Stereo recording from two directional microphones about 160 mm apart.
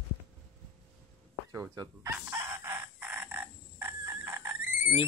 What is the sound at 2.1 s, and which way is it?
Chicken, 15° right (ahead or behind).